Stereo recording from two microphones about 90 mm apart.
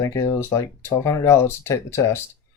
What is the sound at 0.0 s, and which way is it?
Speech, 35° left (ahead or behind).